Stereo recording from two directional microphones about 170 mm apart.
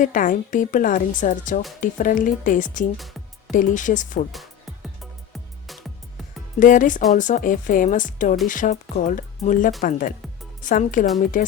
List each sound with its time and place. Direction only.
0.0 s a woman's voice: 50° left (ahead or behind)
5.3 s music: centre (ahead or behind)
6.6 s a woman's voice: 50° left (ahead or behind)